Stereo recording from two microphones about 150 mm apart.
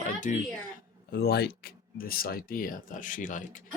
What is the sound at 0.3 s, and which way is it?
Speech, 60° left (ahead or behind).